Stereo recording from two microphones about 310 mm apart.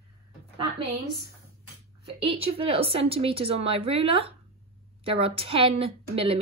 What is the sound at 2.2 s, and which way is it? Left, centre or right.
A woman's voice, centre.